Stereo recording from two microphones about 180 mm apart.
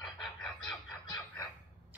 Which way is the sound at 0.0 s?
Centre (ahead or behind).